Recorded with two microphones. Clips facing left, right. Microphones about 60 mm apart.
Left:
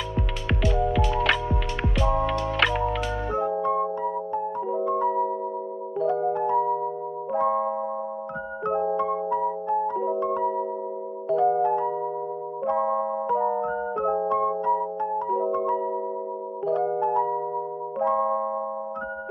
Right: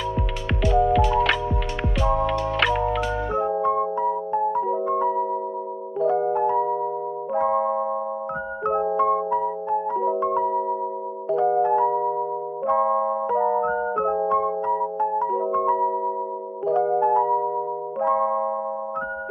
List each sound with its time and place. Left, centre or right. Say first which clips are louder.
0.7 s music: right 6 dB; right
1.1 s music: right 3 dB; centre
2.0 s music: right 2 dB; right
2.5 s music: right 1 dB; centre
3.0 s music: right 3 dB; right
9.0 s music: right 4 dB; right
15.2 s music: right 1 dB; centre
15.5 s music: right 4 dB; right
17.2 s music: right 4 dB; right